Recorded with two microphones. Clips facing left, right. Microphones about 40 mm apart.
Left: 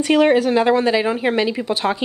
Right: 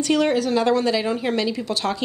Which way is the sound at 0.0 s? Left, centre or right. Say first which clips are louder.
Left 5 dB; left.